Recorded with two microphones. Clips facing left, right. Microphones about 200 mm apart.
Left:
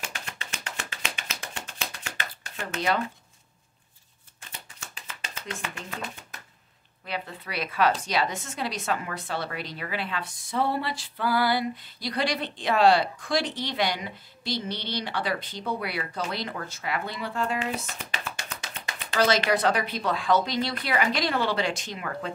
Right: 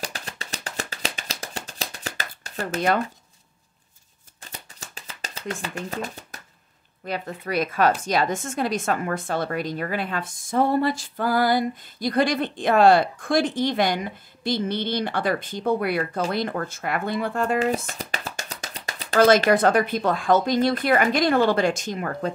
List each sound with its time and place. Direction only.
0.0 s music: 35° right (ahead or behind)
4.4 s shuffling cards: 40° right (ahead or behind)
5.6 s a woman's voice: 40° right (ahead or behind)